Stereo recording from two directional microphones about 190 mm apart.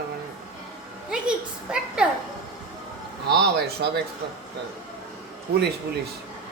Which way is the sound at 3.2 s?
60° right (ahead or behind).